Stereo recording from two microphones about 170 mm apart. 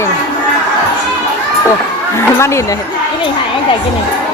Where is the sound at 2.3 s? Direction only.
15° left (ahead or behind).